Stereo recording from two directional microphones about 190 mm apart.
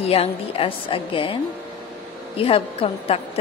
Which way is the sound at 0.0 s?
30° left (ahead or behind).